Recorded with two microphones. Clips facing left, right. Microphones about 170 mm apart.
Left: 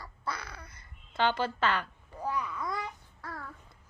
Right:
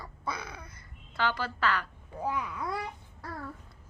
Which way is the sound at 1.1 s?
20° left (ahead or behind).